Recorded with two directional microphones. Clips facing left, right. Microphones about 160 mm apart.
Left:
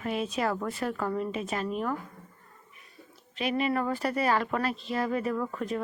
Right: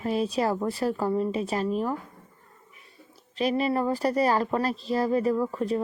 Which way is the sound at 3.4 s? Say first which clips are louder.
Right 3 dB; 35° right (ahead or behind).